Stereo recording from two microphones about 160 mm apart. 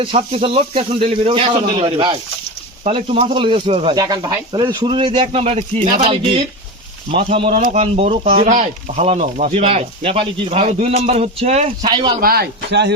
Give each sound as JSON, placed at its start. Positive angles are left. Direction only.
{"t": 0.0, "sound": "speech", "side_deg": -35}
{"t": 3.9, "sound": "speech", "side_deg": -25}
{"t": 12.2, "sound": "a man's voice", "side_deg": -75}